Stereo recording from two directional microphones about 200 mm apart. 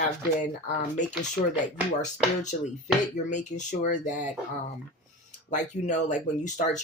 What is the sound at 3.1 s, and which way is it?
Speech, 35° left (ahead or behind).